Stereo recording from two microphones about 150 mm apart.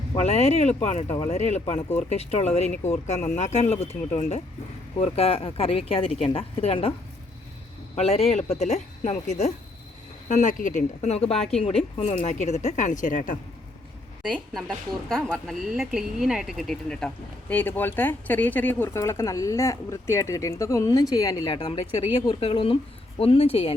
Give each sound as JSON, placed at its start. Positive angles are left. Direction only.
{"t": 0.2, "sound": "speech", "side_deg": 45}
{"t": 1.0, "sound": "speech", "side_deg": 20}
{"t": 1.3, "sound": "speech", "side_deg": 50}
{"t": 7.9, "sound": "speech", "side_deg": 45}
{"t": 14.7, "sound": "speech", "side_deg": 0}